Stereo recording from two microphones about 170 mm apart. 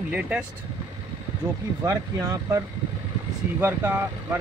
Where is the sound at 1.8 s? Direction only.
20° right (ahead or behind).